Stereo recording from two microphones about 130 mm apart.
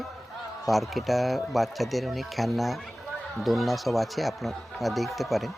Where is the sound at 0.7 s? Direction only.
Centre (ahead or behind).